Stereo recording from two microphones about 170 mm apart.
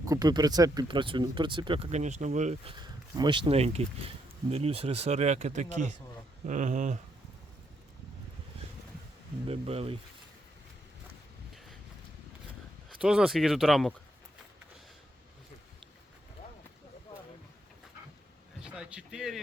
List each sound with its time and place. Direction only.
0.0 s speech: 20° right (ahead or behind)
1.9 s speech: 45° right (ahead or behind)
2.7 s speech: 25° right (ahead or behind); by 7.0 s 45° right (ahead or behind)
9.5 s speech: 35° right (ahead or behind)
13.0 s speech: 5° right (ahead or behind)
18.6 s a sound: 5° right (ahead or behind)